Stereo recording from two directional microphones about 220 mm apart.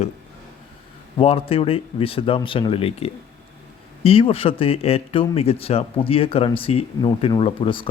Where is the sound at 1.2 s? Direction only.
25° left (ahead or behind).